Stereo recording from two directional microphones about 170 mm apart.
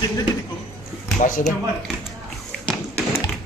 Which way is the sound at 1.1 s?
45° left (ahead or behind).